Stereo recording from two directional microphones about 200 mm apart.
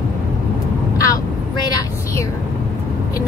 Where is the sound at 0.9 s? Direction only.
15° left (ahead or behind).